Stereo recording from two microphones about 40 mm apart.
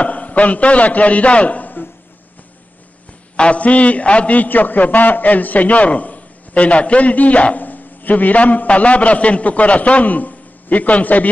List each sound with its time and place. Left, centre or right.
0.0 s a man's voice: left
3.3 s a man's voice: left